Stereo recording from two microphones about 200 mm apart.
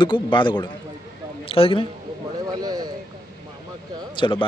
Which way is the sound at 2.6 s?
20° right (ahead or behind).